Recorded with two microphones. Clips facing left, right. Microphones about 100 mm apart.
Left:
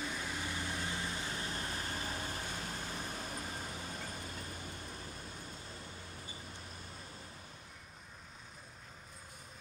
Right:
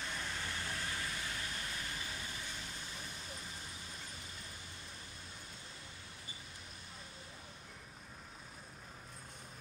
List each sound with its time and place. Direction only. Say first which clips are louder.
0.0 s vehicle: left 3 dB; 10° left (ahead or behind); by 4.1 s 60° left (ahead or behind)